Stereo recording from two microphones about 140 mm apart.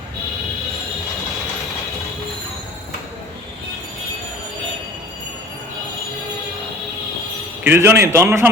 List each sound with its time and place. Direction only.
7.6 s a man's voice: 15° right (ahead or behind)